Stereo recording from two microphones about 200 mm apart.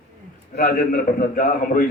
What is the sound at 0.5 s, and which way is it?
A man's voice, 45° left (ahead or behind).